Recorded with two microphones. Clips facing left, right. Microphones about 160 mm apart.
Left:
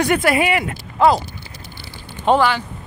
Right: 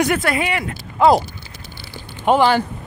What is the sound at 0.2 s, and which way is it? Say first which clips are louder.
Speech: left 4 dB; 10° left (ahead or behind).